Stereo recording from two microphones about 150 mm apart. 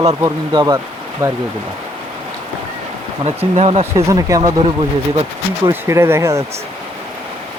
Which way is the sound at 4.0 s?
20° right (ahead or behind).